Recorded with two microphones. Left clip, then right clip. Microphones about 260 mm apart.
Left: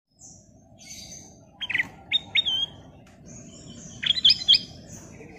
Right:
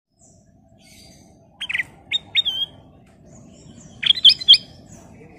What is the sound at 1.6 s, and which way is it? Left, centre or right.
Bird, right.